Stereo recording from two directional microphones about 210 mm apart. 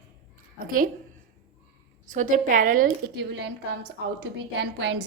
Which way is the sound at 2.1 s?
35° right (ahead or behind).